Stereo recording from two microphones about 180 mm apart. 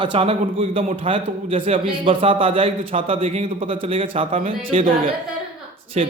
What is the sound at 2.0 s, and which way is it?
A man's voice, 30° right (ahead or behind).